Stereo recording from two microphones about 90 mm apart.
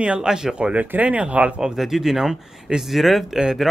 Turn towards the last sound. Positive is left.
turn(degrees=-5)  # may be behind; listen again after turning